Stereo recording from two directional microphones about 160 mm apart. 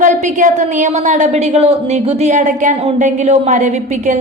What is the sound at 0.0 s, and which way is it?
A woman's voice, 50° right (ahead or behind).